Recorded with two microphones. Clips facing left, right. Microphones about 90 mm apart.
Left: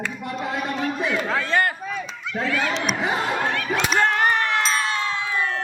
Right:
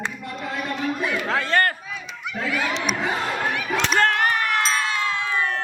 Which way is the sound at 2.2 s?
15° right (ahead or behind).